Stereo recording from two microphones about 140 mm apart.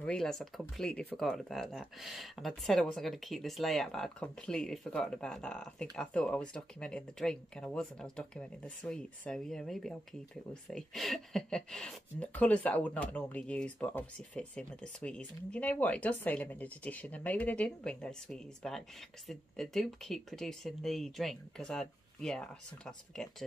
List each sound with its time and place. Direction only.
0.0 s speech: 5° left (ahead or behind)